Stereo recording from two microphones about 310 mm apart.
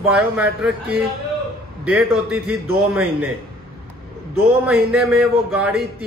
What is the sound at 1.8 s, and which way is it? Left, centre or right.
Speech, centre.